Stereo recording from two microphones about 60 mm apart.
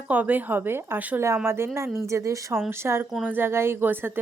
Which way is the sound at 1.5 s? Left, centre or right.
Right.